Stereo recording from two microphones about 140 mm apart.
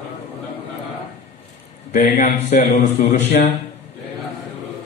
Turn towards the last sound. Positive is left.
turn(degrees=55)  # may be behind; listen again after turning